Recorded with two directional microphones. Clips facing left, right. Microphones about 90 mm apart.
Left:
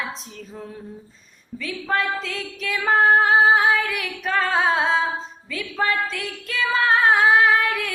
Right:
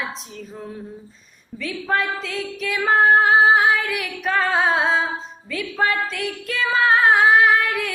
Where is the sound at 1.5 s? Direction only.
35° right (ahead or behind).